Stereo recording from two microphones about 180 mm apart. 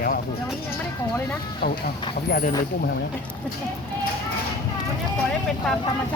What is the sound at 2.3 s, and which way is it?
Speech, 55° left (ahead or behind).